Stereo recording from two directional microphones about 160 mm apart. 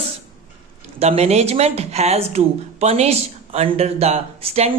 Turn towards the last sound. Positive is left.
turn(degrees=-40)  # may be behind; listen again after turning